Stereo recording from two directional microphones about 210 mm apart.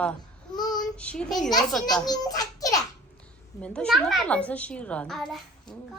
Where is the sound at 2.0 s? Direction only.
20° left (ahead or behind).